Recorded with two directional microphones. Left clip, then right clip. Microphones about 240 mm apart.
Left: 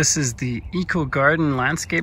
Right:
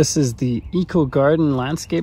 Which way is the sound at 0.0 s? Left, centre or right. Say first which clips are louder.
Right 3 dB; right.